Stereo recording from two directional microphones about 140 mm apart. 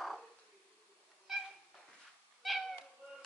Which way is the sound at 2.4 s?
Centre (ahead or behind).